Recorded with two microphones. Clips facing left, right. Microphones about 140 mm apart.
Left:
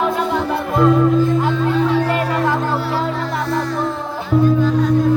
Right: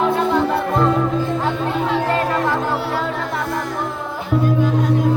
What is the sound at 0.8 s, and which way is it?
Music, 5° left (ahead or behind).